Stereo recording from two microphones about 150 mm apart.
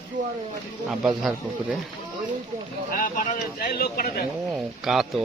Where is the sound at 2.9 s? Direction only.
60° left (ahead or behind); by 4.2 s 90° left.